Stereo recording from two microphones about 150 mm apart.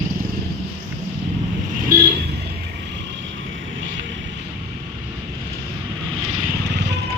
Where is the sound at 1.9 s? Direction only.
70° right (ahead or behind).